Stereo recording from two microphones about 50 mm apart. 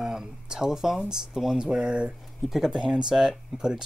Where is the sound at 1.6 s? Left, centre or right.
Right.